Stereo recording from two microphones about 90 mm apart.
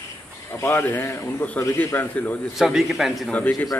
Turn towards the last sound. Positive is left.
turn(degrees=15)  # may be behind; listen again after turning